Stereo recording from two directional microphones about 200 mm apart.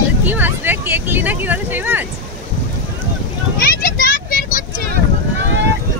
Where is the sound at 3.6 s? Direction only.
45° left (ahead or behind).